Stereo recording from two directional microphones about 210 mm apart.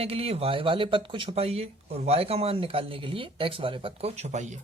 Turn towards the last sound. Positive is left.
turn(degrees=-35)  # may be behind; listen again after turning